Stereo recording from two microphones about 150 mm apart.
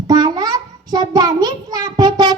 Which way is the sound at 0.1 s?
25° right (ahead or behind).